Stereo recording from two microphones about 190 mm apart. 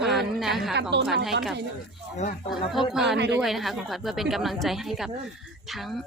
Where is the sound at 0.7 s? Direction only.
65° right (ahead or behind).